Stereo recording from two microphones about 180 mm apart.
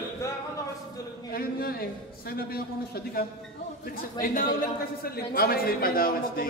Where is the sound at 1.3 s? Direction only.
55° left (ahead or behind).